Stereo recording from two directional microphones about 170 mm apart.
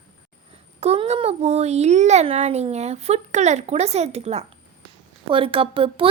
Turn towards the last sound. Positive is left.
turn(degrees=-35)  # may be behind; listen again after turning